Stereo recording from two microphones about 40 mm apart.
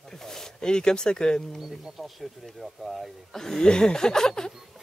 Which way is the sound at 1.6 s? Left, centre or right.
Centre.